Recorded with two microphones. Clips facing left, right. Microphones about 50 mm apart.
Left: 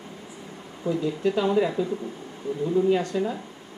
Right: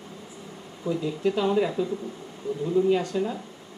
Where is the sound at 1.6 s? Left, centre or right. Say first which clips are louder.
Left 1 dB; left.